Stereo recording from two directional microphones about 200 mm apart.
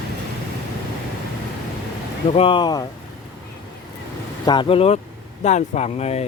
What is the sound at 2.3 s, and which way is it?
Speech, 25° left (ahead or behind).